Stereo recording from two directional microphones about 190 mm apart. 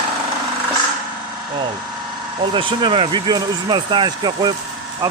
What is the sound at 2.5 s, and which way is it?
Speech, 25° right (ahead or behind).